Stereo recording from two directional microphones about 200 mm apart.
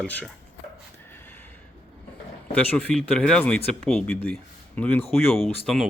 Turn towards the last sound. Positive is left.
turn(degrees=0)  # may be behind; listen again after turning